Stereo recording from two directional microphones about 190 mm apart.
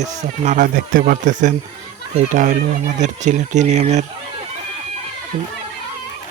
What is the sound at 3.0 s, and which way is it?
Speech, 40° right (ahead or behind).